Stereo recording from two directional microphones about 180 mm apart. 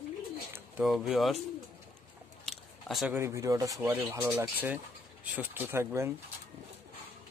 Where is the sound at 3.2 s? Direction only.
15° right (ahead or behind).